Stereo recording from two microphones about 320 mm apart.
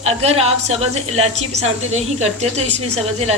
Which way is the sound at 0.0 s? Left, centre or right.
Centre.